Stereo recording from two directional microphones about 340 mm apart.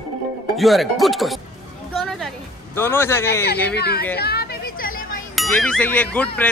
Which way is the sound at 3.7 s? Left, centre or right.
Left.